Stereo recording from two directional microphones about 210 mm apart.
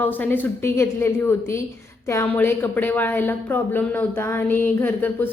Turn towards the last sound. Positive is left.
turn(degrees=10)  # may be behind; listen again after turning